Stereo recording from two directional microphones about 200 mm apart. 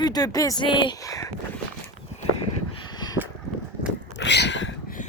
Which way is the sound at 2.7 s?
20° left (ahead or behind).